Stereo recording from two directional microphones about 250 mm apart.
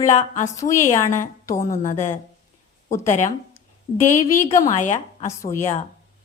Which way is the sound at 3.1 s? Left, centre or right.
Left.